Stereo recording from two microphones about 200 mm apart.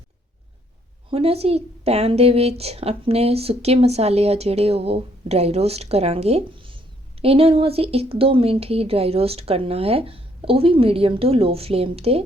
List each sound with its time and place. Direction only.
1.1 s a woman's voice: 30° right (ahead or behind)